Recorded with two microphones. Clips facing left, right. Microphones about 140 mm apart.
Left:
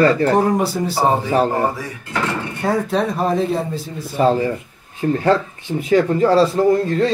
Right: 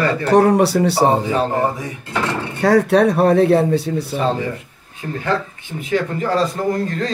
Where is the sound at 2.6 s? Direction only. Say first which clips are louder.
Right 6 dB; 80° right.